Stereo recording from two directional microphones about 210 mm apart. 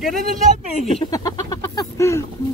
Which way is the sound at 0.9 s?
25° left (ahead or behind).